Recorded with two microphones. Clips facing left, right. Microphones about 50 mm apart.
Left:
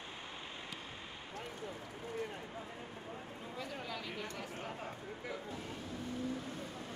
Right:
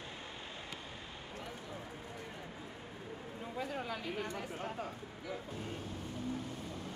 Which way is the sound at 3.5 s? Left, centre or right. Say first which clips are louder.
Right 4 dB; centre.